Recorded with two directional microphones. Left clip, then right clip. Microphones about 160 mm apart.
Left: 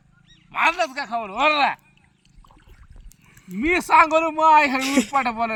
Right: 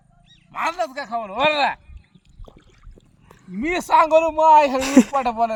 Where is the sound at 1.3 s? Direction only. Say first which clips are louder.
Even; 40° right (ahead or behind).